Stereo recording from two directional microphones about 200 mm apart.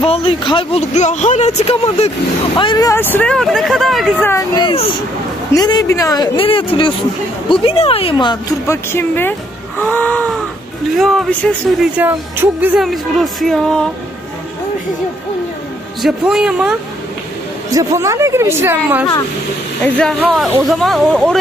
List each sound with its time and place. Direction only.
0.0 s speech: 30° left (ahead or behind)
2.5 s speech: 25° left (ahead or behind); by 4.3 s centre (ahead or behind)
4.3 s speech: 20° left (ahead or behind)
9.8 s a sound: 10° left (ahead or behind)
11.0 s speech: centre (ahead or behind)
16.0 s speech: 5° right (ahead or behind)
17.6 s a woman's voice: 15° right (ahead or behind)
19.8 s speech: 5° left (ahead or behind)